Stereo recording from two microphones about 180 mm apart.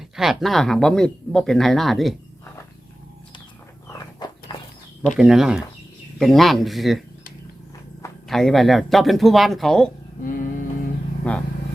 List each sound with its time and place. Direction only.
0.2 s speech: centre (ahead or behind)
3.8 s a sound: 20° left (ahead or behind)
5.1 s speech: centre (ahead or behind)
8.3 s speech: centre (ahead or behind)
10.2 s music: 50° left (ahead or behind)
11.3 s speech: 10° left (ahead or behind)